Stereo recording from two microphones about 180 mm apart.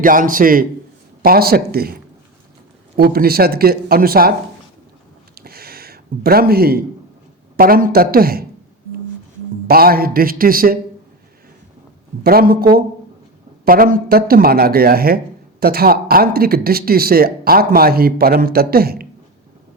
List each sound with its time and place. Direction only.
0.0 s speech: 50° right (ahead or behind)
5.3 s a sound: 55° right (ahead or behind)
7.5 s speech: 55° right (ahead or behind)
9.6 s speech: 55° right (ahead or behind)
12.2 s speech: 55° right (ahead or behind)